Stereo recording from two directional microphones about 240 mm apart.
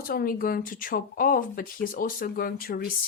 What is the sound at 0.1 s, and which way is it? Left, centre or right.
Speech, left.